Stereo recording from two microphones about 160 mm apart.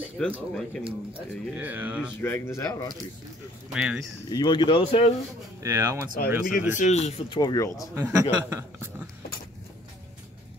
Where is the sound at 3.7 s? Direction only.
5° right (ahead or behind).